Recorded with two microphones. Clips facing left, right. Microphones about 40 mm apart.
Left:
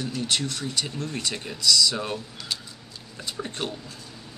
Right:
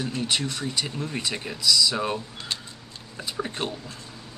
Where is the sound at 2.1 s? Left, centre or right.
Right.